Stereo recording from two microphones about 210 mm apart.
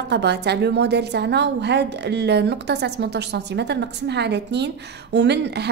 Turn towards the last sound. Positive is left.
turn(degrees=-55)  # may be behind; listen again after turning